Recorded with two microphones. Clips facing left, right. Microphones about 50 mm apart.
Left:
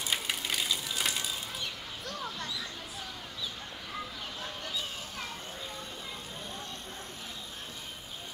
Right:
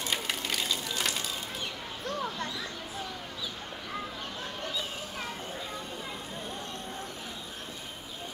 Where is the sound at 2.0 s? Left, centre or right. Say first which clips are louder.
Right 5 dB; right.